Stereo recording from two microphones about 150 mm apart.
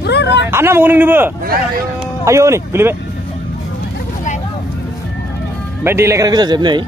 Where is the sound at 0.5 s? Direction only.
15° right (ahead or behind).